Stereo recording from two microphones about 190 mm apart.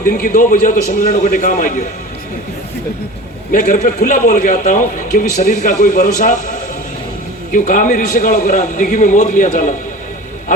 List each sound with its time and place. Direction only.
0.0 s a man's voice: 45° left (ahead or behind)
3.5 s a man's voice: 40° left (ahead or behind)
7.5 s a man's voice: 45° left (ahead or behind)